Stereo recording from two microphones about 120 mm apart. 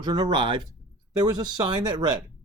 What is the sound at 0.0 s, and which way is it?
Speech, 40° right (ahead or behind).